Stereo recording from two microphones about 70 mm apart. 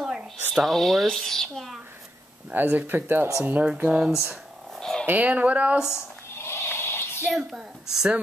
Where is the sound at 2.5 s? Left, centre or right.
Right.